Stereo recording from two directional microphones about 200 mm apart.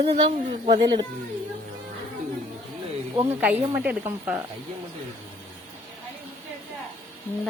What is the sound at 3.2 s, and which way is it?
Speech, 10° right (ahead or behind).